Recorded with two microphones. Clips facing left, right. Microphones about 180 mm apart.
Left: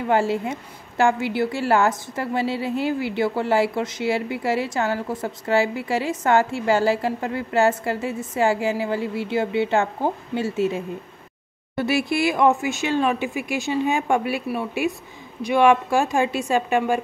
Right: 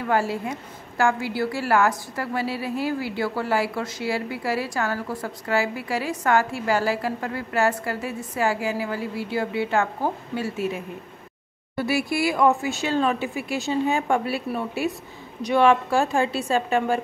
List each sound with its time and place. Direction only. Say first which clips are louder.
0.0 s a woman's voice: left 3 dB; 25° left (ahead or behind)